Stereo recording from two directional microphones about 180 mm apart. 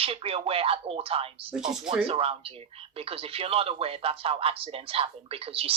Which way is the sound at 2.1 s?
35° right (ahead or behind).